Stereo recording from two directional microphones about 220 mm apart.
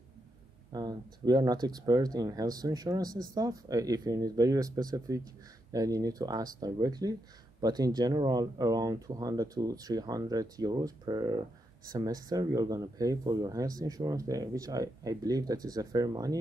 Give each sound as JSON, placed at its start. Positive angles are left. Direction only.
{"t": 0.7, "sound": "speech", "side_deg": -20}